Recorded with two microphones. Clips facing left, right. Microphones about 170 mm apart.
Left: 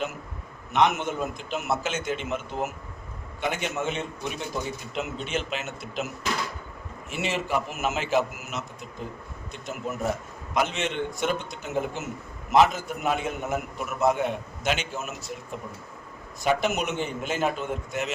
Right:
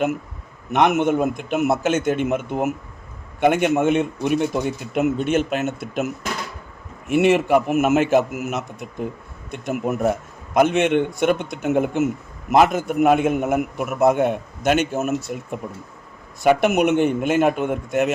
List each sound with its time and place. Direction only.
0.7 s a man's voice: 60° right (ahead or behind)
7.1 s a man's voice: 60° right (ahead or behind)